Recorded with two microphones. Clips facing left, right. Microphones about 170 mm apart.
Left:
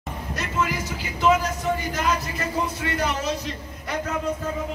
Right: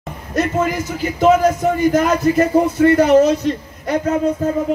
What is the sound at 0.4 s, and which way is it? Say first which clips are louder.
A man's voice: right 10 dB; 50° right (ahead or behind).